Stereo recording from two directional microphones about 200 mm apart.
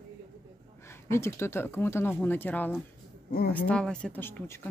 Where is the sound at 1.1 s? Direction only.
10° left (ahead or behind).